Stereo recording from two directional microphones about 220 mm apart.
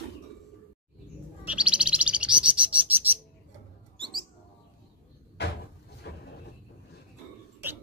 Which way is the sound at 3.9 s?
20° right (ahead or behind).